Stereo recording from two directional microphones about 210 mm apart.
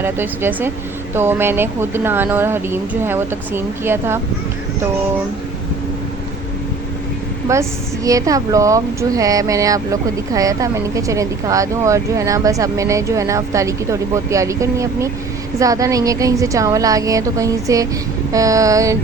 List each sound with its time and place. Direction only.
0.0 s speech: 10° right (ahead or behind)
7.4 s speech: 15° right (ahead or behind)